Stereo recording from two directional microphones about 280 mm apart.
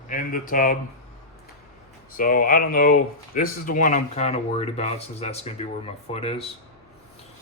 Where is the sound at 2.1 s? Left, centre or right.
Left.